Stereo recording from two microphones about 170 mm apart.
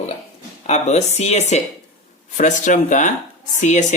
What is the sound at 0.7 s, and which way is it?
Speech, 40° left (ahead or behind).